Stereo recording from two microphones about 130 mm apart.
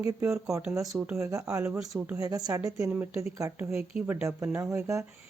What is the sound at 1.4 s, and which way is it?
Speech, 10° right (ahead or behind).